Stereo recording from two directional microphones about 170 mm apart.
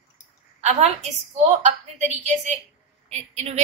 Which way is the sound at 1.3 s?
45° right (ahead or behind).